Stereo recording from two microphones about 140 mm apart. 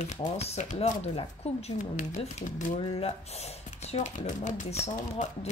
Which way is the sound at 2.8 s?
45° left (ahead or behind).